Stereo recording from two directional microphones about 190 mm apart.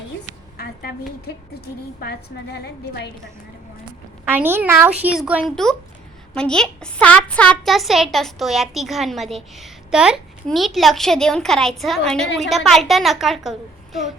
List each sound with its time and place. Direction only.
0.5 s a sound: 55° left (ahead or behind)
1.6 s a woman's voice: 55° left (ahead or behind)
4.3 s a woman's voice: 10° right (ahead or behind)